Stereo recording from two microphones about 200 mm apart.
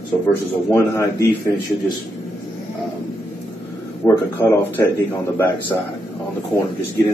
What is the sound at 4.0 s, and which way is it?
Speech, 15° left (ahead or behind).